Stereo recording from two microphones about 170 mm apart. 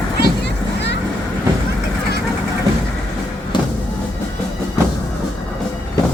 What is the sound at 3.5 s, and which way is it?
Music, 30° left (ahead or behind).